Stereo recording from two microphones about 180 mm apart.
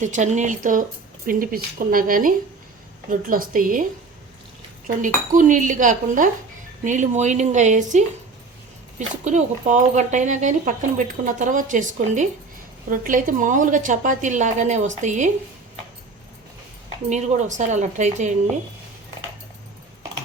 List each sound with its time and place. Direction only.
0.0 s speech: 40° right (ahead or behind)
5.0 s speech: 45° right (ahead or behind)
17.1 s a woman's voice: 40° right (ahead or behind)